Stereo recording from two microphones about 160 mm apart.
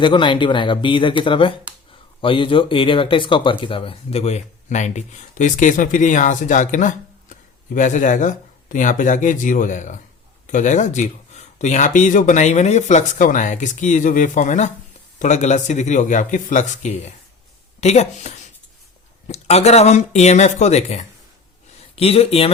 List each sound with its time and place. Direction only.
0.0 s speech: 30° left (ahead or behind)
19.3 s speech: 40° left (ahead or behind)